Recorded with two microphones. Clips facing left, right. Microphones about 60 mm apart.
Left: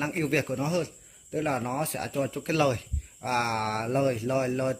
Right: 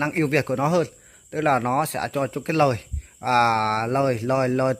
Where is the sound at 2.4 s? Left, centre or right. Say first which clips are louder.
Right 5 dB; right.